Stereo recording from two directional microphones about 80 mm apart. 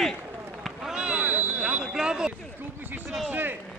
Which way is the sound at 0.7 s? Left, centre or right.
Centre.